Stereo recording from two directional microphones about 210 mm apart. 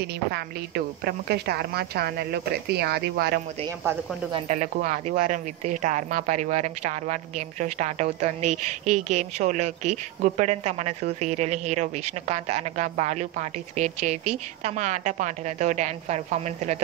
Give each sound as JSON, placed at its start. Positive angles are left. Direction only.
{"t": 0.0, "sound": "a woman's voice", "side_deg": -50}
{"t": 4.5, "sound": "a woman's voice", "side_deg": -40}